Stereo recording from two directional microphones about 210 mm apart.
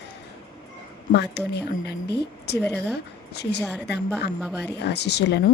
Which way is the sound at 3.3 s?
50° left (ahead or behind).